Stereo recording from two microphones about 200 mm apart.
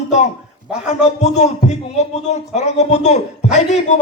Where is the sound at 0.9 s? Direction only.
35° left (ahead or behind).